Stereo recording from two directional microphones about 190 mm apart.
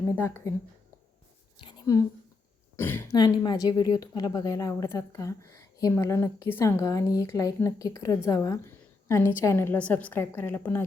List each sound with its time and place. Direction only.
0.0 s speech: 15° left (ahead or behind)
1.5 s a sound: 25° left (ahead or behind)
2.7 s speech: 10° left (ahead or behind)